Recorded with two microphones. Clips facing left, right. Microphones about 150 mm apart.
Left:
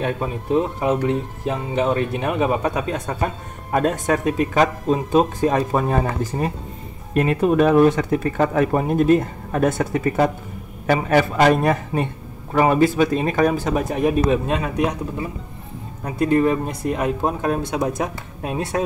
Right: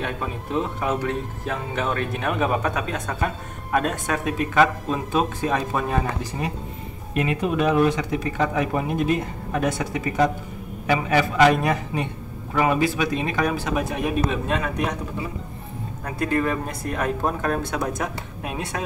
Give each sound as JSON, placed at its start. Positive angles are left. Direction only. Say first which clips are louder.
{"t": 0.0, "sound": "speech", "louder": "left 5 dB", "side_deg": 30}
{"t": 16.0, "sound": "speech", "louder": "left 6 dB", "side_deg": 25}